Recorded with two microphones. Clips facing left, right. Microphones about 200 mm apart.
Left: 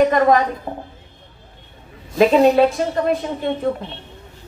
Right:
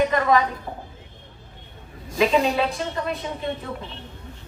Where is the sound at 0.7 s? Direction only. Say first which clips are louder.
Left 6 dB; 65° left (ahead or behind).